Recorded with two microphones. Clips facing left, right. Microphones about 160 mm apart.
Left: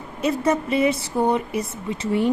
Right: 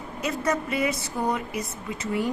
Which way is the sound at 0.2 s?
30° left (ahead or behind).